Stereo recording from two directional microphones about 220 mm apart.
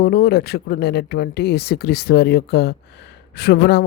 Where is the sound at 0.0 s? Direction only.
45° left (ahead or behind).